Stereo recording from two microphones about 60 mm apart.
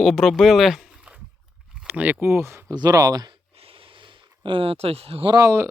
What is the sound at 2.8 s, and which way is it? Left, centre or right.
Speech, right.